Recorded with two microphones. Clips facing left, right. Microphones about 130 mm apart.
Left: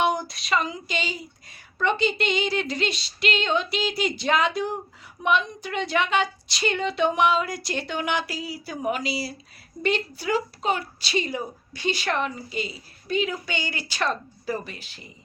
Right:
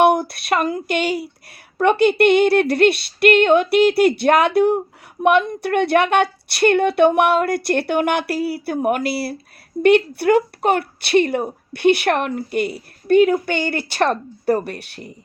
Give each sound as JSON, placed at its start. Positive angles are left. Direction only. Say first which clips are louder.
{"t": 0.0, "sound": "speech", "louder": "right 9 dB", "side_deg": -60}